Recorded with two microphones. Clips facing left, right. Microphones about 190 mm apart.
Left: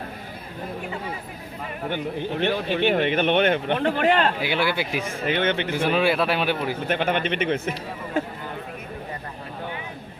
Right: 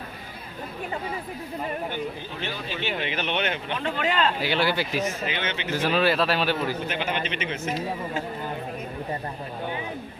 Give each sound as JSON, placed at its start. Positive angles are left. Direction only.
{"t": 1.9, "sound": "speech", "side_deg": 65}
{"t": 4.5, "sound": "a man's voice", "side_deg": 10}
{"t": 5.2, "sound": "speech", "side_deg": 55}
{"t": 5.9, "sound": "a man's voice", "side_deg": 10}
{"t": 6.7, "sound": "speech", "side_deg": 55}